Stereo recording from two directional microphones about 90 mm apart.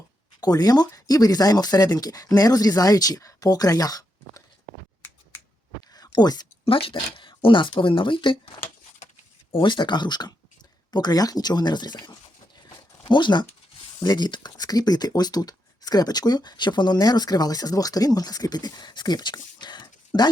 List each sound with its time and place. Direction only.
0.3 s speech: 45° left (ahead or behind)
6.1 s speech: 50° left (ahead or behind)
6.7 s speech: 90° left; by 8.4 s 65° left (ahead or behind)
9.5 s speech: 70° left (ahead or behind); by 11.9 s 50° left (ahead or behind)
13.1 s speech: 60° left (ahead or behind)